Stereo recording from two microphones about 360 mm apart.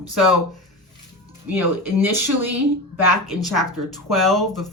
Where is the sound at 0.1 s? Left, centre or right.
Centre.